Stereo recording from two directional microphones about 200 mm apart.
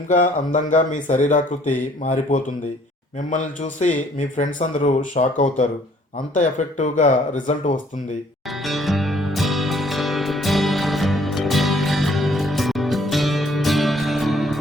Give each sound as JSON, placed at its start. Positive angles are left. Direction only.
{"t": 0.1, "sound": "speech", "side_deg": 40}
{"t": 3.2, "sound": "speech", "side_deg": 40}
{"t": 8.6, "sound": "music", "side_deg": 0}